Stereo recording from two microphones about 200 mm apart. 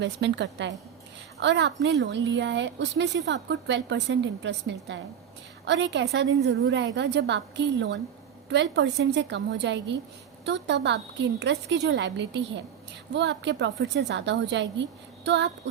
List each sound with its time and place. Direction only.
0.0 s a woman's voice: 60° right (ahead or behind)